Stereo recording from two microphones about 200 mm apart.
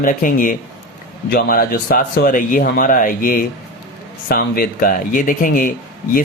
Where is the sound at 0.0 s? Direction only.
40° left (ahead or behind).